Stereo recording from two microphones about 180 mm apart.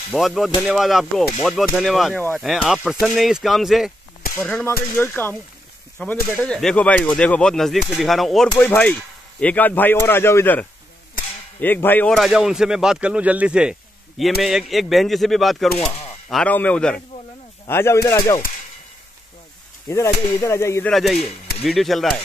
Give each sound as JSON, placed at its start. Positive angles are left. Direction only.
{"t": 0.1, "sound": "speech", "side_deg": 0}
{"t": 19.9, "sound": "speech", "side_deg": 15}
{"t": 20.9, "sound": "speech", "side_deg": 0}